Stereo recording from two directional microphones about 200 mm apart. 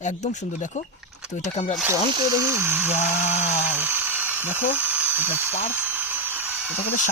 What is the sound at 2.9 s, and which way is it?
Speech, 35° left (ahead or behind).